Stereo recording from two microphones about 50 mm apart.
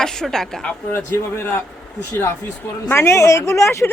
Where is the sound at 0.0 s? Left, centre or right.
Centre.